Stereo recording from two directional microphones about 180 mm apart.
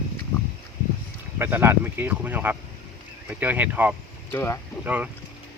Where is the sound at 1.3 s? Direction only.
10° right (ahead or behind).